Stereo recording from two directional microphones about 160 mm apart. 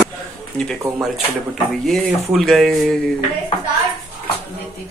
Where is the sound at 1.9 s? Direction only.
Centre (ahead or behind).